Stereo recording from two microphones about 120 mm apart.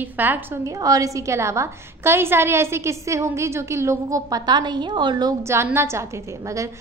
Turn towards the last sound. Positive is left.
turn(degrees=-20)  # may be behind; listen again after turning